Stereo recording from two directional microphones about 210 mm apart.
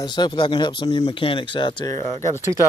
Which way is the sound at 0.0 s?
20° left (ahead or behind).